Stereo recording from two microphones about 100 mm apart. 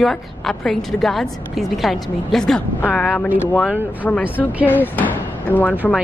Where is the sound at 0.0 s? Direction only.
Centre (ahead or behind).